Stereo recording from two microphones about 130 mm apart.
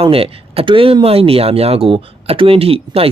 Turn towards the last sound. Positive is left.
turn(degrees=-50)  # may be behind; listen again after turning